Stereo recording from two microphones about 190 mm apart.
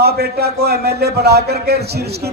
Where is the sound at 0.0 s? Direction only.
55° right (ahead or behind).